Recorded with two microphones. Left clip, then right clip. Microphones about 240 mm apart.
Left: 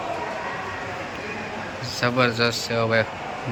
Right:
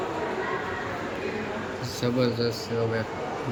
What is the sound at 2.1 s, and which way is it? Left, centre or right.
Speech, left.